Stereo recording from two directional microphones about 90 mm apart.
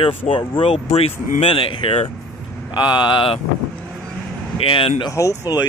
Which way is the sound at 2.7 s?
60° left (ahead or behind).